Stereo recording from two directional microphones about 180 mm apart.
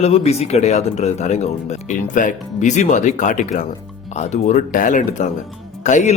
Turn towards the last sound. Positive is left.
turn(degrees=40)  # may be behind; listen again after turning